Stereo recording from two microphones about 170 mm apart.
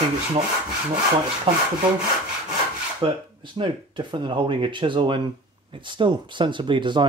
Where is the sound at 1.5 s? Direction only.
30° right (ahead or behind).